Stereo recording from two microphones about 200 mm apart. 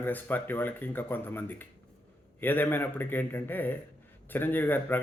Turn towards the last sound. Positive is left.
turn(degrees=10)  # may be behind; listen again after turning